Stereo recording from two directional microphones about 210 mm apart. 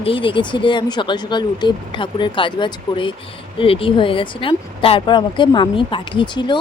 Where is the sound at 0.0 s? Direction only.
25° left (ahead or behind).